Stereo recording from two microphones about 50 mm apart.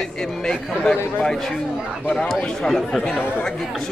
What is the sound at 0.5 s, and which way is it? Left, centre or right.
A man's voice, centre.